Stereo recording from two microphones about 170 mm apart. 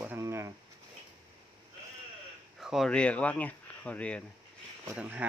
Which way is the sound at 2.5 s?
Centre (ahead or behind).